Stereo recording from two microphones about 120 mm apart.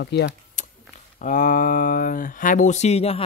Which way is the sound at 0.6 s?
90° left.